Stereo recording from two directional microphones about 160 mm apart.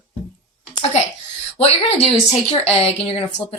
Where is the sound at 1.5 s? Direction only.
40° left (ahead or behind).